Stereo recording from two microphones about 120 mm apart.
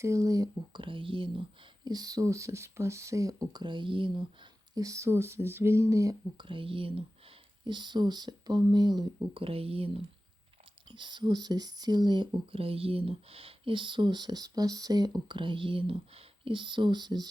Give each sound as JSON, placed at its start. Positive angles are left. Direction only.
{"t": 0.0, "sound": "speech", "side_deg": -25}
{"t": 0.8, "sound": "speech", "side_deg": -45}
{"t": 4.7, "sound": "speech", "side_deg": -30}
{"t": 6.4, "sound": "speech", "side_deg": -45}
{"t": 9.3, "sound": "speech", "side_deg": -50}
{"t": 10.9, "sound": "speech", "side_deg": -40}